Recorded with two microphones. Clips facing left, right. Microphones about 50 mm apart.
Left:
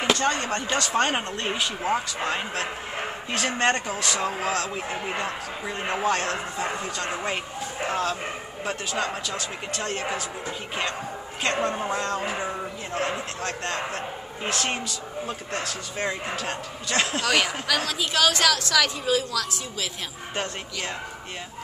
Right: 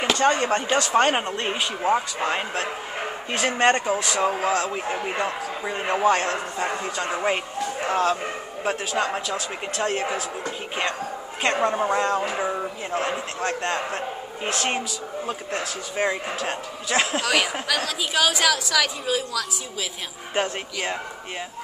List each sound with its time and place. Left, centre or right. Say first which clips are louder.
0.2 s a man's voice: right 5 dB; right; by 4.2 s centre
4.2 s a man's voice: right 5 dB; centre
7.9 s speech: right 5 dB; right
8.6 s a man's voice: right 4 dB; centre
11.4 s a man's voice: right 4 dB; centre
20.3 s speech: right 6 dB; centre